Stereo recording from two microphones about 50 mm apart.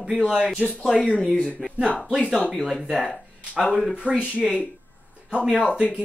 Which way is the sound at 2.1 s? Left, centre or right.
Centre.